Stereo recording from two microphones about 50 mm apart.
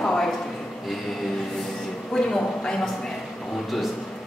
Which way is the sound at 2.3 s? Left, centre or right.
Centre.